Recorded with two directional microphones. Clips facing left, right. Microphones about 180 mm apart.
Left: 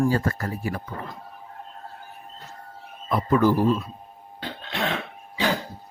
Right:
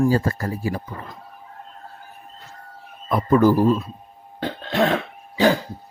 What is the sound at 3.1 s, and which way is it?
Speech, 45° right (ahead or behind).